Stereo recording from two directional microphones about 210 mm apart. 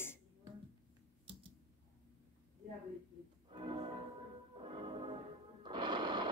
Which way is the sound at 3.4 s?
20° right (ahead or behind).